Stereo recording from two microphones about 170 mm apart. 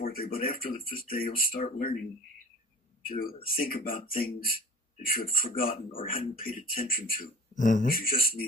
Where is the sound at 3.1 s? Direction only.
60° left (ahead or behind).